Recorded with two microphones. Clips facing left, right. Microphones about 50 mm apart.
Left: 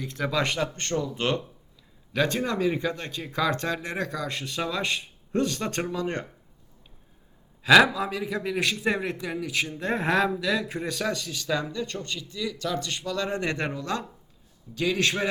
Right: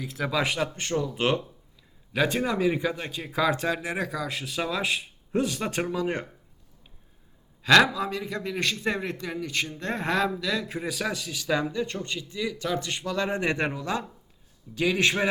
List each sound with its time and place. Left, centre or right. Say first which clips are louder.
0.0 s speech: even; centre
7.6 s a man's voice: left 1 dB; centre